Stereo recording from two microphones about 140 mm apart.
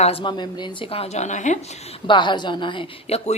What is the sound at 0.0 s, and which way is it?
Speech, 40° left (ahead or behind).